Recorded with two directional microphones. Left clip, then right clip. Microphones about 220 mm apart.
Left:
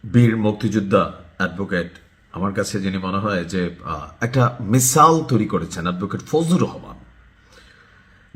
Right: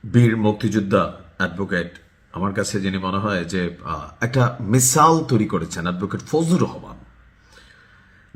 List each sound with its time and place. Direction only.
0.1 s speech: centre (ahead or behind)